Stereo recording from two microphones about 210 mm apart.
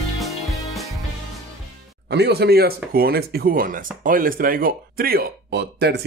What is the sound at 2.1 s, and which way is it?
Speech, 50° right (ahead or behind).